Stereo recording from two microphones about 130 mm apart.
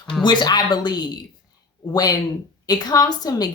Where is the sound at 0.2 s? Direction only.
35° left (ahead or behind).